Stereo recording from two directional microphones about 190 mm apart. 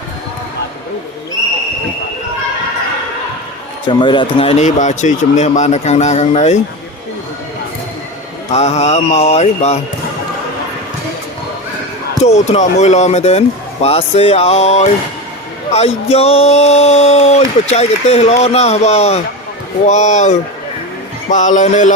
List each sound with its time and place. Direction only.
3.8 s speech: 25° left (ahead or behind)
8.5 s speech: 35° left (ahead or behind)
12.2 s speech: 35° left (ahead or behind)